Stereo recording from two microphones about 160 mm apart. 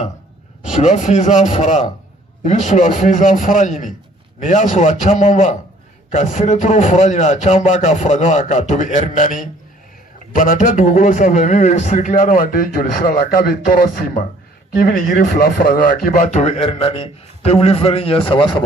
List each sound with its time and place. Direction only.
0.6 s a man's voice: 50° left (ahead or behind); by 18.6 s 30° left (ahead or behind)